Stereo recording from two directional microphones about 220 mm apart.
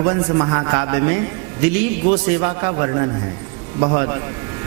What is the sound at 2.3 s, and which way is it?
Speech, 25° right (ahead or behind).